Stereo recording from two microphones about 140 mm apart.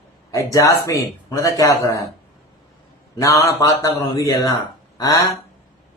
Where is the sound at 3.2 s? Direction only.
20° left (ahead or behind).